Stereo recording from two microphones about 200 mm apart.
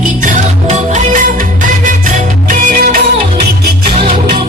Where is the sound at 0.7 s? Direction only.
40° right (ahead or behind).